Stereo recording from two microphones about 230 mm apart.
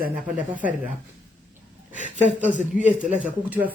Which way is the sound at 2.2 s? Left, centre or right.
Left.